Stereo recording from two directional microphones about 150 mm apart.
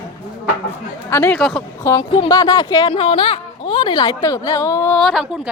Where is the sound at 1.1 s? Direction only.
20° left (ahead or behind).